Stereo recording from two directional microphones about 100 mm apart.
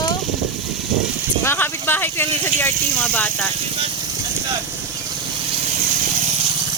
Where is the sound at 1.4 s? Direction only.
25° left (ahead or behind).